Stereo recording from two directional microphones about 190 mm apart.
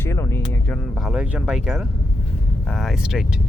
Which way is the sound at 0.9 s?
5° right (ahead or behind).